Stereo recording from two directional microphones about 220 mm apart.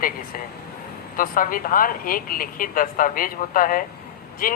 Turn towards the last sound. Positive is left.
turn(degrees=40)  # may be behind; listen again after turning